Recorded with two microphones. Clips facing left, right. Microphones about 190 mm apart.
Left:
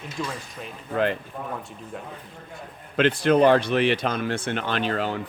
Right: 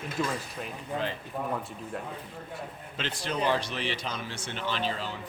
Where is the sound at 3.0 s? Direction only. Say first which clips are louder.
Left 13 dB; 60° left (ahead or behind).